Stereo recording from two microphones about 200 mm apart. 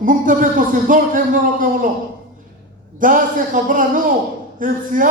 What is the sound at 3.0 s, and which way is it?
A man's voice, 40° right (ahead or behind).